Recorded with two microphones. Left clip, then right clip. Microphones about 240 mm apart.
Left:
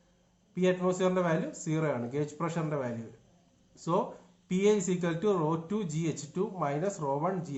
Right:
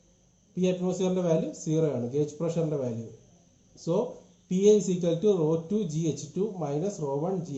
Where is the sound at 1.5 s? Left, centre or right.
Left.